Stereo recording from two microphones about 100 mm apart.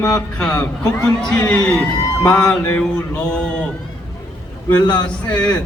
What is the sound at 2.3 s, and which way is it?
Speech, 15° left (ahead or behind).